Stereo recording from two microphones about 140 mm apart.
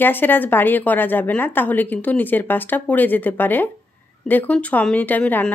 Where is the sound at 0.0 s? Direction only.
15° left (ahead or behind).